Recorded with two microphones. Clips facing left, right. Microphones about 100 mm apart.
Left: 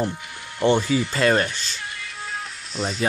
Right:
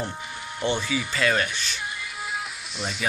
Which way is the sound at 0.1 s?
20° right (ahead or behind).